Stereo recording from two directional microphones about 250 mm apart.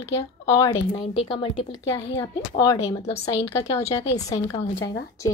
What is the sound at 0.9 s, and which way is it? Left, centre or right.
A woman's voice, left.